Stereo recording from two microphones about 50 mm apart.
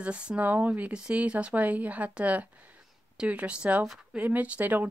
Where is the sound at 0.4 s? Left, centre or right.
Right.